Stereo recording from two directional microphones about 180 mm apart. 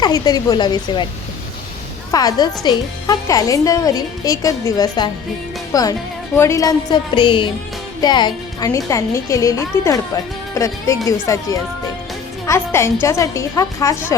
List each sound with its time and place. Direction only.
0.0 s a woman's voice: 20° left (ahead or behind)
2.1 s a woman's voice: 20° left (ahead or behind)